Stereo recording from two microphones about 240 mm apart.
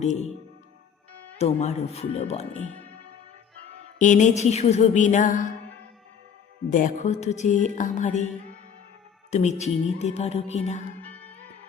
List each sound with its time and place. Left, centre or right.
0.0 s music: left
1.4 s music: left
3.9 s music: left
6.7 s music: left
9.3 s music: left
11.0 s music: centre